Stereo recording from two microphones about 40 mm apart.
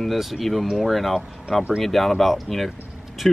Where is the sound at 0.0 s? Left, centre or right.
Centre.